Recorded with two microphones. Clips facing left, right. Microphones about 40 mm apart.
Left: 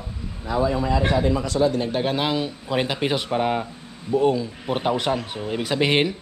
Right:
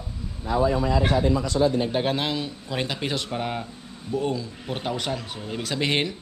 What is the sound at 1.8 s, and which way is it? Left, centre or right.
Speech, centre.